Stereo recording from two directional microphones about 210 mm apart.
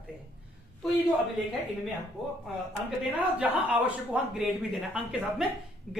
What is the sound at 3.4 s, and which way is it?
Speech, 5° right (ahead or behind).